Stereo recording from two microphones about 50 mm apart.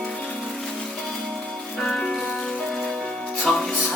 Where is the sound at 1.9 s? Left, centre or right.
Centre.